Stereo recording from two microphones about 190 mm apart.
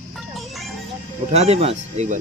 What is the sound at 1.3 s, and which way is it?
Speech, 35° right (ahead or behind).